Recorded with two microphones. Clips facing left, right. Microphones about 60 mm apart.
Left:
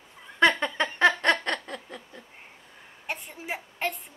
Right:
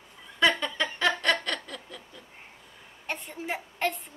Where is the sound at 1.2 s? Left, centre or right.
Left.